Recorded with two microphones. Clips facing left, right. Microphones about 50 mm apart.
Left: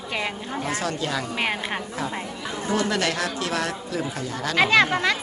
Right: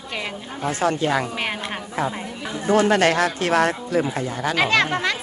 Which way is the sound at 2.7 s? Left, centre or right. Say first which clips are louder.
Right 7 dB; right.